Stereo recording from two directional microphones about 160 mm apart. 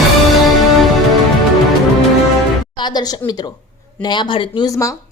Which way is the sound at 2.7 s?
25° left (ahead or behind).